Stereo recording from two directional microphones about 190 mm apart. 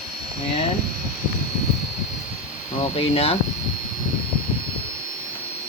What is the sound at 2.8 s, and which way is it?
Speech, 30° left (ahead or behind).